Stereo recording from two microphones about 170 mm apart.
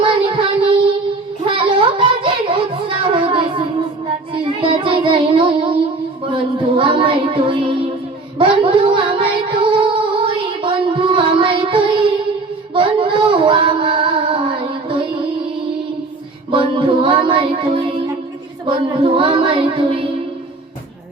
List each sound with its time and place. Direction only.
0.0 s child singing: 30° right (ahead or behind)
4.4 s music: 30° right (ahead or behind)
8.4 s a sound: 30° right (ahead or behind)
10.2 s music: 30° right (ahead or behind)
12.7 s female singing: 30° right (ahead or behind)
16.5 s music: 30° right (ahead or behind)
18.6 s child singing: 30° right (ahead or behind)